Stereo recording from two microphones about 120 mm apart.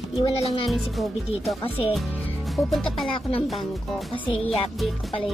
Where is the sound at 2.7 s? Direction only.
Centre (ahead or behind).